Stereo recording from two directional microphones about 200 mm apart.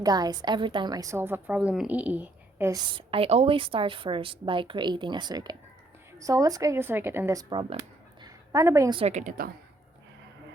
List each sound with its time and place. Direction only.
0.0 s a woman's voice: 20° right (ahead or behind)
2.9 s a woman's voice: 30° right (ahead or behind)
8.2 s a sound: 15° right (ahead or behind)
9.0 s a woman's voice: 35° right (ahead or behind)